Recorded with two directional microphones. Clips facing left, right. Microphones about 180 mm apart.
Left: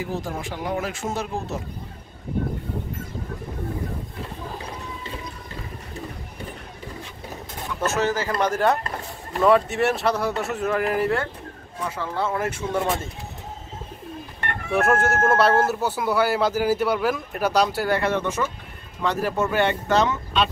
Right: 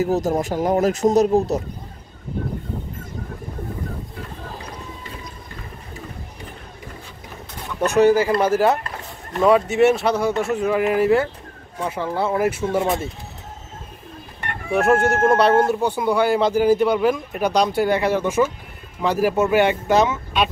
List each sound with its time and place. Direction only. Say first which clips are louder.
0.0 s speech: right 9 dB; 40° right (ahead or behind)
7.8 s speech: right 9 dB; 15° right (ahead or behind)
11.8 s speech: right 4 dB; 15° right (ahead or behind)
14.7 s speech: right 4 dB; centre (ahead or behind)
18.2 s speech: right 7 dB; 15° right (ahead or behind)